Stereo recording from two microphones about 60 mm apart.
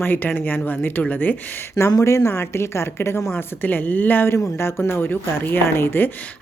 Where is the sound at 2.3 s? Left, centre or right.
Left.